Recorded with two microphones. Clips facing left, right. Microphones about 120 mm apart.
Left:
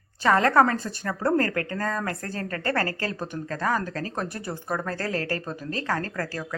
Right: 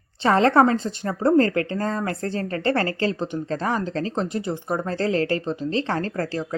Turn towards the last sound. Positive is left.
turn(degrees=-25)  # may be behind; listen again after turning